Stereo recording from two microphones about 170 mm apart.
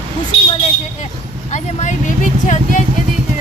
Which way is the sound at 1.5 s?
45° left (ahead or behind).